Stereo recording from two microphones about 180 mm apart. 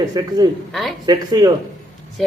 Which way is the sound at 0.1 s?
20° right (ahead or behind).